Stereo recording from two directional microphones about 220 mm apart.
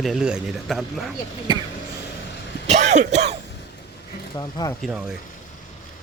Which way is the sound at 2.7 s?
30° right (ahead or behind).